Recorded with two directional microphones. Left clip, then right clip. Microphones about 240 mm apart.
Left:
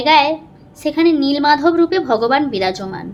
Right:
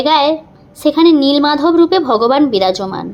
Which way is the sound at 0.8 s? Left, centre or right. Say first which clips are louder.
Right 5 dB; right.